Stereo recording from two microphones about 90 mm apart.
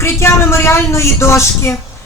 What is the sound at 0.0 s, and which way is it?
A woman's voice, 30° left (ahead or behind).